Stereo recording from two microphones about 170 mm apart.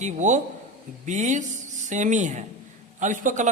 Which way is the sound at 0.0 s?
45° right (ahead or behind).